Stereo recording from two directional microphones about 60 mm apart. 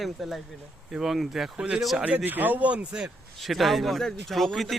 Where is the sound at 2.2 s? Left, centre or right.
Right.